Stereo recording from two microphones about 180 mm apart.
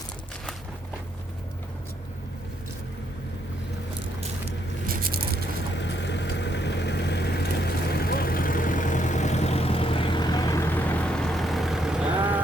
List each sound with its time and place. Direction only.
4.9 s scrape: 55° right (ahead or behind)
5.7 s vehicle: 75° left (ahead or behind); by 12.4 s 10° right (ahead or behind)